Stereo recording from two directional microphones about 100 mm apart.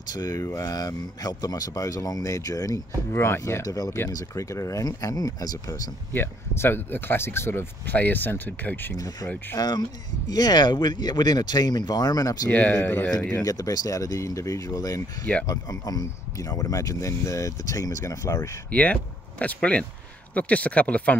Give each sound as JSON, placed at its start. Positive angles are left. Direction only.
{"t": 0.0, "sound": "speech", "side_deg": 40}
{"t": 3.6, "sound": "speech", "side_deg": 40}
{"t": 6.1, "sound": "speech", "side_deg": 25}
{"t": 8.9, "sound": "speech", "side_deg": 40}
{"t": 12.4, "sound": "speech", "side_deg": 15}
{"t": 13.4, "sound": "speech", "side_deg": 35}
{"t": 18.7, "sound": "speech", "side_deg": 15}